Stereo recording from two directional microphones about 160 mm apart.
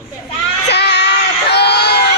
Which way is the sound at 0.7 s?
90° left.